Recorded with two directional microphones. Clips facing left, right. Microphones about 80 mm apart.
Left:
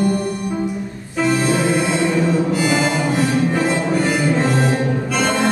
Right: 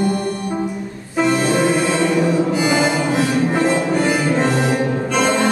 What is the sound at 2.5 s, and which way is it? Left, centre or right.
Harmonica, centre.